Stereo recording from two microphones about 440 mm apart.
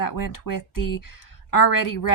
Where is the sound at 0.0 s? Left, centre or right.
Left.